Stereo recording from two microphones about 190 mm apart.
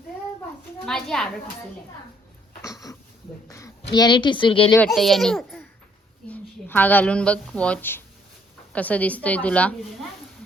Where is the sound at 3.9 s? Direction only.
25° left (ahead or behind).